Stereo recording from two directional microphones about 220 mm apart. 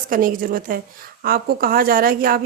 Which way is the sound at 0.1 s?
40° right (ahead or behind).